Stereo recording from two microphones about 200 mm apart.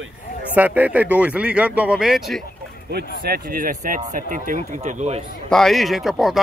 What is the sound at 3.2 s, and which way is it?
Speech, 50° right (ahead or behind).